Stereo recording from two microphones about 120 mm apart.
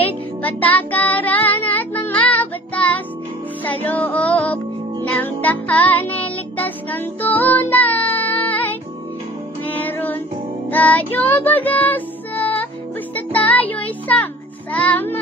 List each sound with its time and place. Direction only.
0.0 s music: 15° left (ahead or behind)